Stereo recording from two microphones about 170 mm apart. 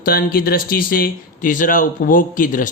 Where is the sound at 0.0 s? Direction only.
60° left (ahead or behind).